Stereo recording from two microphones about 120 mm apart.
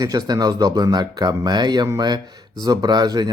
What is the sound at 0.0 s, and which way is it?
Speech, 35° right (ahead or behind).